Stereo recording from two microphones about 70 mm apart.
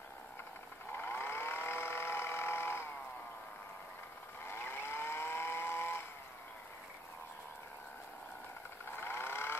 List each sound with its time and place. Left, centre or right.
0.9 s vehicle: left
4.5 s vehicle: left
8.9 s vehicle: left